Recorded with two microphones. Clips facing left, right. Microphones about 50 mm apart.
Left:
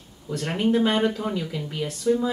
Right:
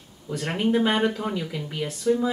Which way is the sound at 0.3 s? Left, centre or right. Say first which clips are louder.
Left 1 dB; centre.